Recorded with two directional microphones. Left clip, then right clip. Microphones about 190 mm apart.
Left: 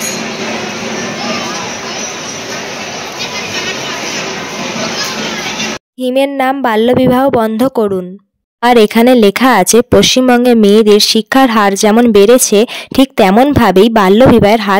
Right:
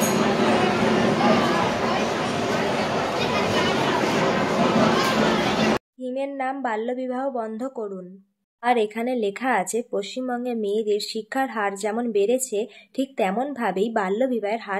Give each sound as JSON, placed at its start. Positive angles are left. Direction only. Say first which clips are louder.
{"t": 6.0, "sound": "speech", "louder": "left 18 dB", "side_deg": 65}